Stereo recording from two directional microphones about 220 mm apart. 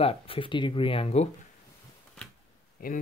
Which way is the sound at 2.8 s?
40° left (ahead or behind).